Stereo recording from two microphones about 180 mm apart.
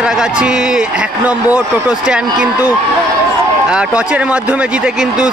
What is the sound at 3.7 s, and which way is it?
A man's voice, 5° right (ahead or behind).